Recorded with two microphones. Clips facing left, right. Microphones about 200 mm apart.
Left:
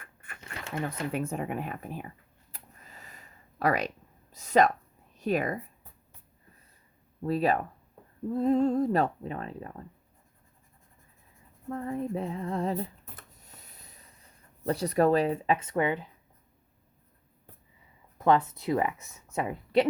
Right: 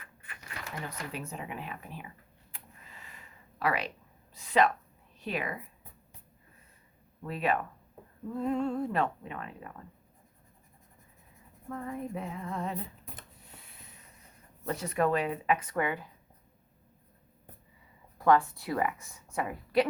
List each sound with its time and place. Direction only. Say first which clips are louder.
0.0 s cash register: left 2 dB; 50° left (ahead or behind)
0.3 s cash register: left 6 dB; 25° left (ahead or behind)
1.1 s speech: left 8 dB; 50° left (ahead or behind)
2.5 s a sound: left 2 dB; 40° left (ahead or behind)
4.4 s speech: left 3 dB; 40° left (ahead or behind)
7.2 s speech: left 4 dB; 35° left (ahead or behind)
11.7 s speech: left 5 dB; 30° left (ahead or behind)
13.4 s a sound: even; 40° left (ahead or behind)
14.6 s speech: left 5 dB; 35° left (ahead or behind)
18.2 s speech: left 1 dB; 20° left (ahead or behind)